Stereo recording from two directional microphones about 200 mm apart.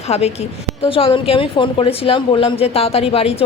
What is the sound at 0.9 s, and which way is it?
A woman's voice, 25° left (ahead or behind).